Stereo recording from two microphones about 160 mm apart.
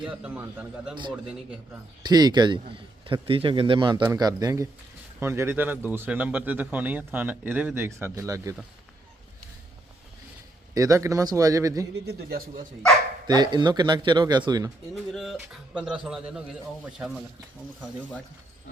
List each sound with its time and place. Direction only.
0.0 s speech: 10° right (ahead or behind)
2.0 s a man's voice: 25° right (ahead or behind)
10.8 s speech: 20° right (ahead or behind)
11.9 s a man's voice: 85° right
13.2 s speech: 25° right (ahead or behind)
15.1 s speech: centre (ahead or behind)